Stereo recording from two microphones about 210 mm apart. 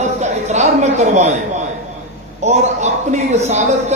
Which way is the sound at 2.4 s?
35° right (ahead or behind).